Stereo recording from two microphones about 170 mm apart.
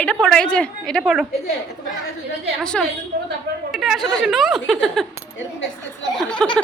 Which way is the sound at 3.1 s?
70° right (ahead or behind).